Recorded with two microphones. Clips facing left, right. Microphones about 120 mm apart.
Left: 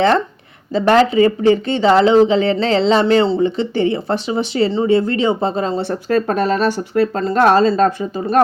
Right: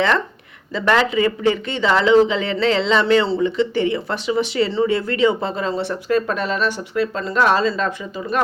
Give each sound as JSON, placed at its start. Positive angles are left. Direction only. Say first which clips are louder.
{"t": 0.7, "sound": "speech", "louder": "left 5 dB", "side_deg": 35}